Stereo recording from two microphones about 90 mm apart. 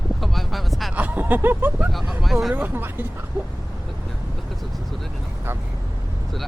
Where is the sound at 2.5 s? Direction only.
20° right (ahead or behind).